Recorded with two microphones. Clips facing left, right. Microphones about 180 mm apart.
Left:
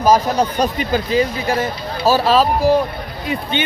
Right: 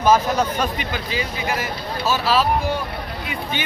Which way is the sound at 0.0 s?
35° left (ahead or behind).